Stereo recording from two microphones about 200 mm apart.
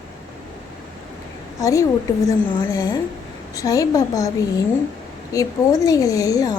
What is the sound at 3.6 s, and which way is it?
Speech, 15° left (ahead or behind).